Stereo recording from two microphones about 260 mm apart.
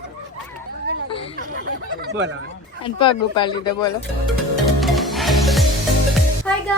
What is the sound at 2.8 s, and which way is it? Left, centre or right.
Speech, centre.